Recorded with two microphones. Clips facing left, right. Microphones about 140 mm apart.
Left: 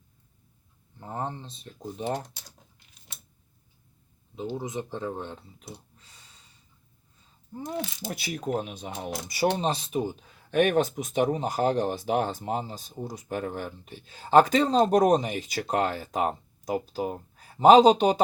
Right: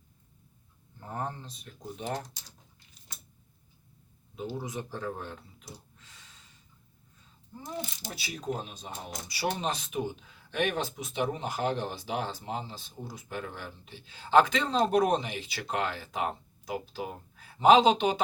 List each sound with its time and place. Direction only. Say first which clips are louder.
0.9 s speech: left 3 dB; 20° left (ahead or behind)
2.4 s speech: left 3 dB; 60° left (ahead or behind)
4.5 s speech: left 5 dB; 20° left (ahead or behind)
6.0 s gasp: even; 35° left (ahead or behind)
7.5 s speech: left 5 dB; 55° left (ahead or behind)
9.6 s speech: left 5 dB; 35° left (ahead or behind)